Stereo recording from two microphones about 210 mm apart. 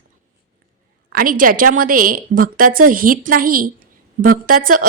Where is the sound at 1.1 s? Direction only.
40° right (ahead or behind).